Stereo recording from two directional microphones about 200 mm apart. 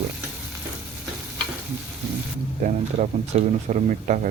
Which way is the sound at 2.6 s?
35° right (ahead or behind).